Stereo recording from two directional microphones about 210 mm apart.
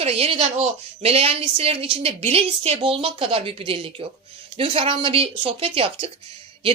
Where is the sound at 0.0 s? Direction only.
30° right (ahead or behind).